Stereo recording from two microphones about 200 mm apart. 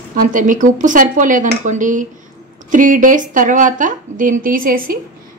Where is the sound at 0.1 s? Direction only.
40° right (ahead or behind).